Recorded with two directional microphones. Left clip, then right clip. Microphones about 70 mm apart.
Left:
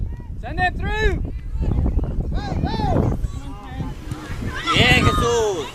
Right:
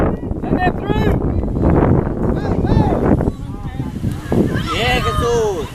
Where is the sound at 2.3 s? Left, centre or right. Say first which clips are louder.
Right 5 dB; left.